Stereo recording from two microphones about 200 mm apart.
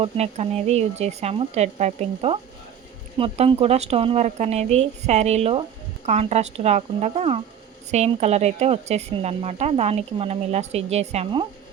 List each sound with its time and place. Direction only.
0.0 s speech: 30° right (ahead or behind)